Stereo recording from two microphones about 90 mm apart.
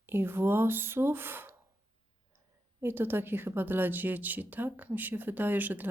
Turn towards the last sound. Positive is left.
turn(degrees=-20)  # may be behind; listen again after turning